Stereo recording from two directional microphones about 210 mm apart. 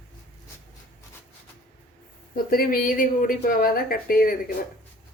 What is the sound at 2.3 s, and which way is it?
Speech, 45° left (ahead or behind).